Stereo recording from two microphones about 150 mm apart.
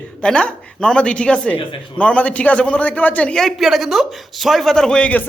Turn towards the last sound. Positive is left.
turn(degrees=5)  # may be behind; listen again after turning